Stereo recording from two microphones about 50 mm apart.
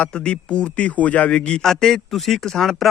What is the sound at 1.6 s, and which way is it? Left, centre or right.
Speech, centre.